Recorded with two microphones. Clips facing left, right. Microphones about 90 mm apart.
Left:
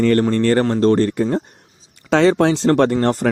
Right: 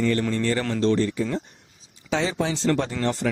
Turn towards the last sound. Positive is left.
turn(degrees=50)  # may be behind; listen again after turning